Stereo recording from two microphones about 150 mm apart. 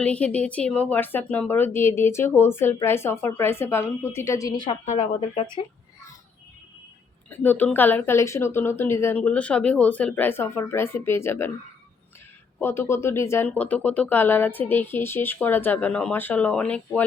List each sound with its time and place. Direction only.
0.0 s speech: 10° left (ahead or behind); by 4.8 s 30° left (ahead or behind)
4.9 s speech: 45° left (ahead or behind)
7.3 s speech: 10° left (ahead or behind)
12.5 s speech: 15° left (ahead or behind)